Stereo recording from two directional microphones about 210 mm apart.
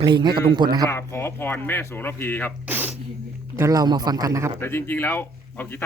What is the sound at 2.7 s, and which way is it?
A man's voice, 10° right (ahead or behind).